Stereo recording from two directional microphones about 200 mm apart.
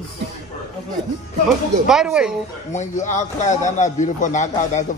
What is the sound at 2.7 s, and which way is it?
A man's voice, 35° left (ahead or behind).